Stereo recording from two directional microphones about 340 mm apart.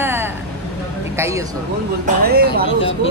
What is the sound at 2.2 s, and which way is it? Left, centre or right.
Speech, right.